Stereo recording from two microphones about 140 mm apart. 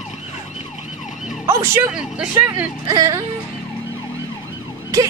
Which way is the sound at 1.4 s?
15° right (ahead or behind).